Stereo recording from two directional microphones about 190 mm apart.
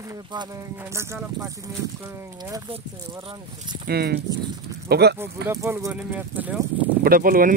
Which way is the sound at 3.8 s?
55° right (ahead or behind).